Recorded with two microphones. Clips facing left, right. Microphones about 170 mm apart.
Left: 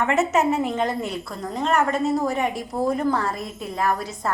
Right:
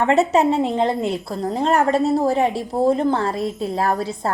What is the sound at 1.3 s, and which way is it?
A woman's voice, 35° right (ahead or behind).